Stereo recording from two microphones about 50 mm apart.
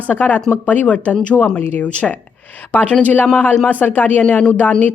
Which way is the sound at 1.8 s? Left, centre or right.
Left.